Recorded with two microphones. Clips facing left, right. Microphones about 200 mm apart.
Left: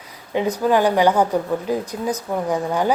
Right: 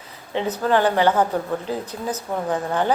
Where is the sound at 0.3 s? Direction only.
10° left (ahead or behind).